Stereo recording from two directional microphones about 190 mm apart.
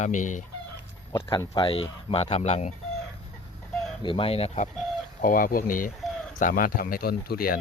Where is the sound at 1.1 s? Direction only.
20° left (ahead or behind); by 2.7 s 35° left (ahead or behind).